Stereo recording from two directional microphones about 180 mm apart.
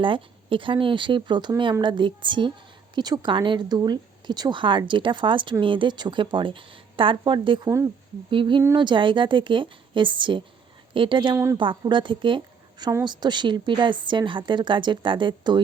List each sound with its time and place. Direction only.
0.0 s speech: 30° right (ahead or behind)